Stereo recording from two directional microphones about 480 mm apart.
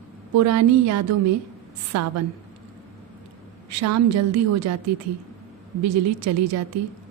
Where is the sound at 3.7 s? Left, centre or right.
Right.